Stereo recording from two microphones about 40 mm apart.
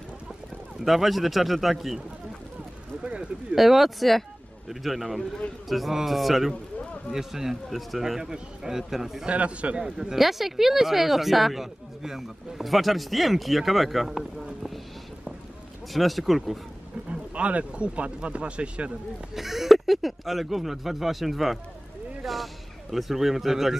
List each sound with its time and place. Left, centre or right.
0.8 s speech: centre
3.0 s speech: right
3.5 s speech: centre
9.3 s speech: right
9.8 s speech: centre
14.1 s speech: centre
15.9 s speech: centre
17.1 s speech: right
19.3 s a man's voice: centre